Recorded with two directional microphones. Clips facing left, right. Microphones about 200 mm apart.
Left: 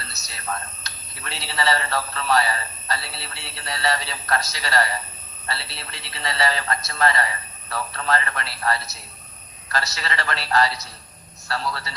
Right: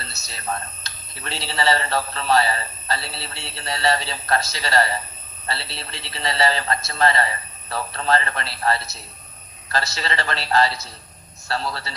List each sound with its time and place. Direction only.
0.1 s a man's voice: 30° right (ahead or behind)